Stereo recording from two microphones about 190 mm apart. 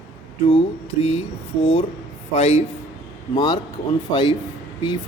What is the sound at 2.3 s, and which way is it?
Speech, 30° left (ahead or behind).